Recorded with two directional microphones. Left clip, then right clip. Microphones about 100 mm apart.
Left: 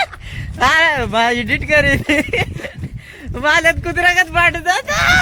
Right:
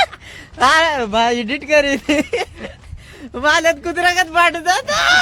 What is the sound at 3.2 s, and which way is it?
Speech, 15° right (ahead or behind).